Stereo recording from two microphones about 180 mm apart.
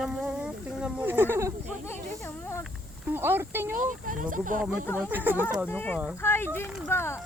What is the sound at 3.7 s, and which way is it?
Speech, 50° right (ahead or behind).